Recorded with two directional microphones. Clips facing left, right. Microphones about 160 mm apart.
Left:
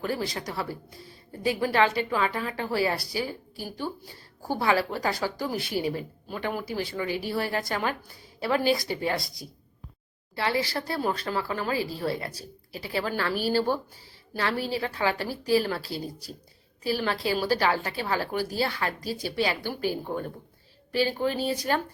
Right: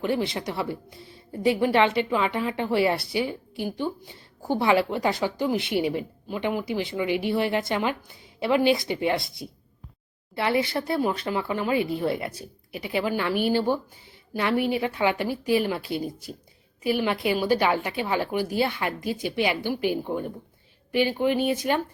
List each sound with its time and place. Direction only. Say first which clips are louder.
0.0 s a woman's voice: right 4 dB; 25° right (ahead or behind)